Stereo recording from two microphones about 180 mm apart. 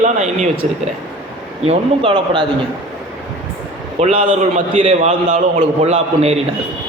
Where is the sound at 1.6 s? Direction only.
35° right (ahead or behind).